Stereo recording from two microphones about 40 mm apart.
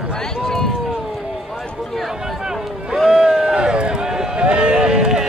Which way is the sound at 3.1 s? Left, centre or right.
Centre.